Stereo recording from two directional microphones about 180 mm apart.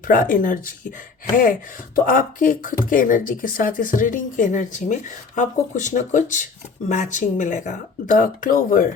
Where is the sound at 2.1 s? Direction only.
50° left (ahead or behind).